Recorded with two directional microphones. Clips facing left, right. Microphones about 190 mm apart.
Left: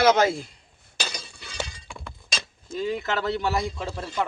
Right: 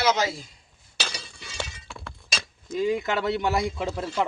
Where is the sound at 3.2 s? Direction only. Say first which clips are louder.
Right 1 dB; 20° right (ahead or behind).